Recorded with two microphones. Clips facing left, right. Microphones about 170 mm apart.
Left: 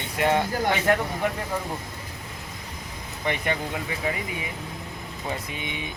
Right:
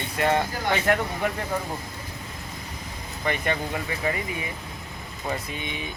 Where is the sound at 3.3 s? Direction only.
15° left (ahead or behind).